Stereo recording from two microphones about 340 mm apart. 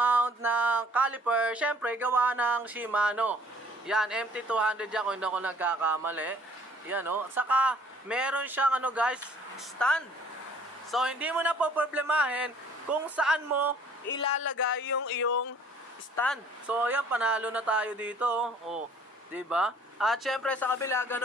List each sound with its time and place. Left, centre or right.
0.0 s a sound: centre
0.9 s speech: centre
14.1 s speech: centre
14.4 s speech: left
16.2 s speech: centre